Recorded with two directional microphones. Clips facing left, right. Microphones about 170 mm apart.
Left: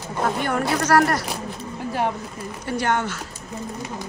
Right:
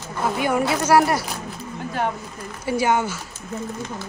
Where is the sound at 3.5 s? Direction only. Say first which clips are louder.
Right 2 dB; 15° left (ahead or behind).